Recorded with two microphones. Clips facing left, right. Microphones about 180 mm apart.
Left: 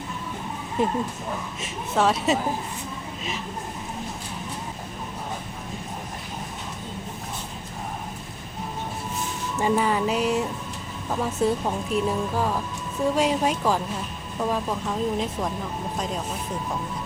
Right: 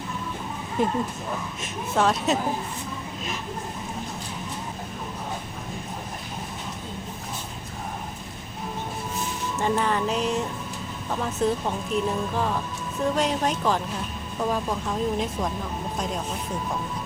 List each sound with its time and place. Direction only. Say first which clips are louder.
0.8 s speech: even; centre (ahead or behind)
9.6 s speech: left 2 dB; 10° left (ahead or behind)